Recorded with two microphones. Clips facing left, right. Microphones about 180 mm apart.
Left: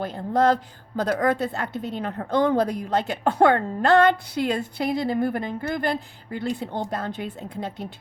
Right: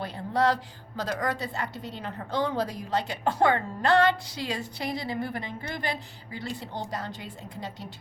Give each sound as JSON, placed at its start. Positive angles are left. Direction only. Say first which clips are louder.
{"t": 0.0, "sound": "a woman's voice", "louder": "left 5 dB", "side_deg": 50}